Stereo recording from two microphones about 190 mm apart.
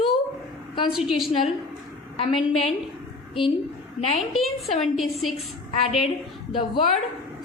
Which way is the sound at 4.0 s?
35° left (ahead or behind).